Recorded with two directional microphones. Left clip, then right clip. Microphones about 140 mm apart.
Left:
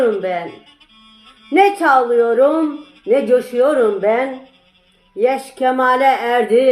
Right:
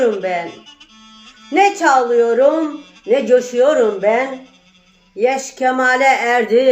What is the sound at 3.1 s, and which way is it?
Speech, 40° right (ahead or behind).